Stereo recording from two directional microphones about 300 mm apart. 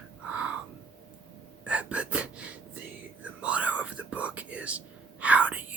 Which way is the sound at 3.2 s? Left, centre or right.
Centre.